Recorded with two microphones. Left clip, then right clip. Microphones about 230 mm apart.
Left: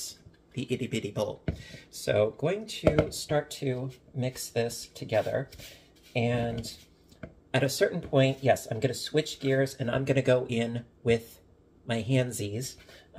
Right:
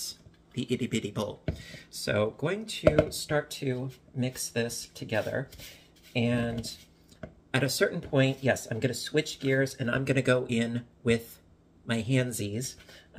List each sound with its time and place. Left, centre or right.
0.6 s speech: right
7.5 s speech: centre